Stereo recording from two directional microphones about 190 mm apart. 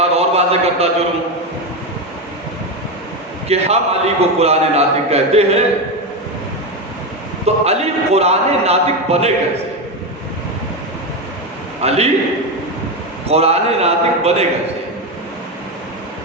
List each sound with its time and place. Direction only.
0.0 s a sound: 35° right (ahead or behind)
3.5 s a man's voice: 35° right (ahead or behind)
7.4 s a man's voice: 35° right (ahead or behind)
11.8 s a man's voice: 35° right (ahead or behind)
13.2 s a man's voice: 35° right (ahead or behind)